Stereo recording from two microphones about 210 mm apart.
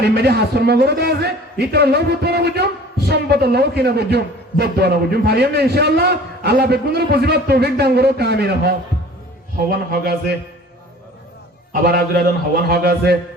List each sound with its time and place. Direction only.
0.1 s a man's voice: 50° right (ahead or behind)
11.7 s a man's voice: 45° right (ahead or behind)